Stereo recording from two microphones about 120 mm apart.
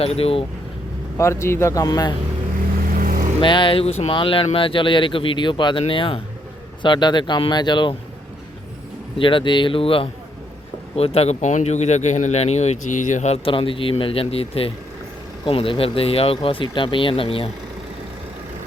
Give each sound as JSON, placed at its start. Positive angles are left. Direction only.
{"t": 0.0, "sound": "speech", "side_deg": 55}
{"t": 1.2, "sound": "a man's voice", "side_deg": 25}
{"t": 3.4, "sound": "speech", "side_deg": 45}
{"t": 4.1, "sound": "speech", "side_deg": 45}
{"t": 9.1, "sound": "speech", "side_deg": 45}